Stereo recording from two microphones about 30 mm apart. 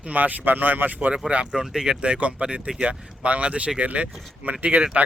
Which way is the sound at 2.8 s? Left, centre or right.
Right.